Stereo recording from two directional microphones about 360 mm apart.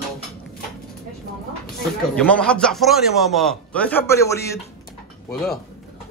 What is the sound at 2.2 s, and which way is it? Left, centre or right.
A man's voice, centre.